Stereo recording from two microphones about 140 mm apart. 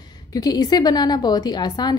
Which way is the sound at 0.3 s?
30° left (ahead or behind).